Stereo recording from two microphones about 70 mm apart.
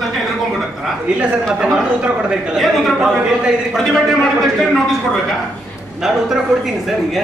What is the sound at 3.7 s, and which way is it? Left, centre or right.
Speech, centre.